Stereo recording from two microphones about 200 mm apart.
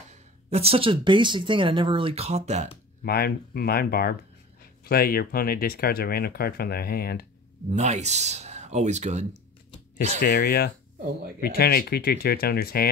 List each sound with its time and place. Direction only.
0.1 s speech: 30° right (ahead or behind)
3.0 s speech: 50° left (ahead or behind)
7.7 s speech: 35° right (ahead or behind)
10.2 s speech: 55° left (ahead or behind)